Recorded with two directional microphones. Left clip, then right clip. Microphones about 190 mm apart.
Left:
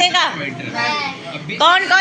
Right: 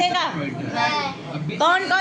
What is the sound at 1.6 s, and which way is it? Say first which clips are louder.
Speech: left 6 dB; 10° right (ahead or behind).